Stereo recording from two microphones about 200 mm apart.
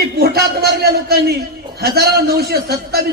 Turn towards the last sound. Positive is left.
turn(degrees=-50)  # may be behind; listen again after turning